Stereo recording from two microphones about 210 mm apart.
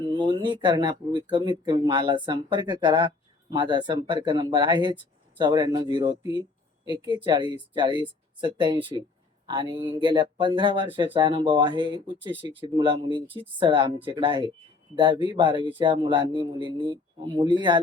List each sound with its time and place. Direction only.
0.1 s speech: 25° right (ahead or behind)